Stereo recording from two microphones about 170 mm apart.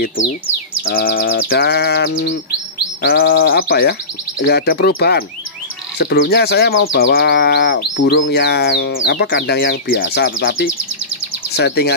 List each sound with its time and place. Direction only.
0.8 s livestock: 65° left (ahead or behind); by 2.3 s 80° left
3.0 s livestock: 65° left (ahead or behind)
11.5 s speech: 75° left (ahead or behind)